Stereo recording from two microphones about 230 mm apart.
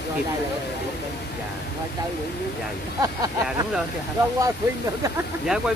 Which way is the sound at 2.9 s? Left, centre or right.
Centre.